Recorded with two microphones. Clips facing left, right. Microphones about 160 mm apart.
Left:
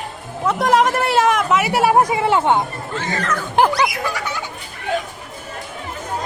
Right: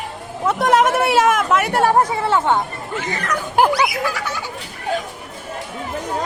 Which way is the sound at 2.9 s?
15° right (ahead or behind).